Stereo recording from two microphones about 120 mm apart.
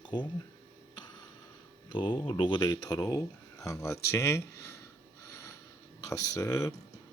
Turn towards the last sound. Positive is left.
turn(degrees=30)  # may be behind; listen again after turning